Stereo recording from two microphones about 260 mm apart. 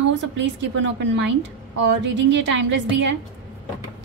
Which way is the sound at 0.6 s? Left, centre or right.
Right.